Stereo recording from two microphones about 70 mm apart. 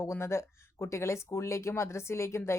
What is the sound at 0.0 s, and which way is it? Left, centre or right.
Speech, left.